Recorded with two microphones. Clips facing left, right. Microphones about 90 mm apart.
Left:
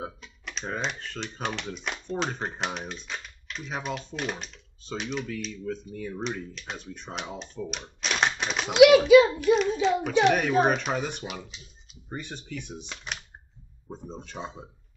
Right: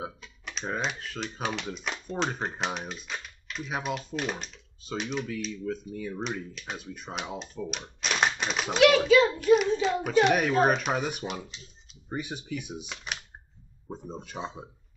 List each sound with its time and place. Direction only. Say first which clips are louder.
0.0 s speech: left 1 dB; centre (ahead or behind)
8.0 s typewriter: even; centre (ahead or behind)
8.4 s a child's voice: even; centre (ahead or behind)
8.7 s a child's voice: left 5 dB; 10° left (ahead or behind)
9.4 s speech: even; 5° right (ahead or behind)
11.4 s a sound: even; 5° left (ahead or behind)
12.1 s speech: right 3 dB; 10° right (ahead or behind)